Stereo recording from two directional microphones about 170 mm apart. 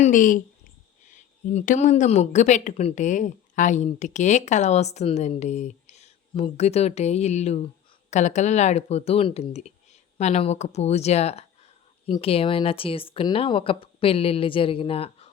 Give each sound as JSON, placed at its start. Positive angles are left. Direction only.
{"t": 0.0, "sound": "speech", "side_deg": 50}